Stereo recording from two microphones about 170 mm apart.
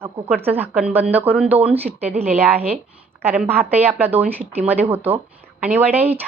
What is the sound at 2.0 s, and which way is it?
Speech, 35° right (ahead or behind).